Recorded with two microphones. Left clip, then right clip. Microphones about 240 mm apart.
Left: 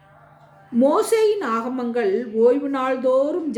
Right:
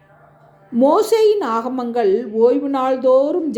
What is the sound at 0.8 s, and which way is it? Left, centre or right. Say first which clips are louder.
A woman's voice: right 4 dB; centre.